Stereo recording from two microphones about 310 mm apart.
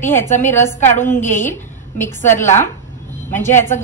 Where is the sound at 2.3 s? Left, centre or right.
Left.